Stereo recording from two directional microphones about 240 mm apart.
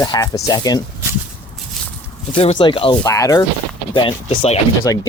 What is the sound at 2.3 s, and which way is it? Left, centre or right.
Speech, left.